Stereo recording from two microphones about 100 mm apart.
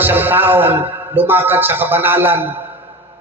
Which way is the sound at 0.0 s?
20° right (ahead or behind).